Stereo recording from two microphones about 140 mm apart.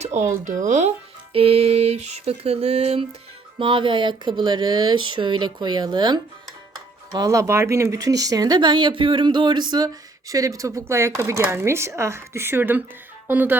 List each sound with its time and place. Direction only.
0.0 s speech: 55° right (ahead or behind); by 13.6 s 15° right (ahead or behind)